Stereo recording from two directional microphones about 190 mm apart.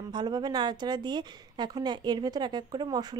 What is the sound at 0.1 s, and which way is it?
A woman's voice, 20° right (ahead or behind).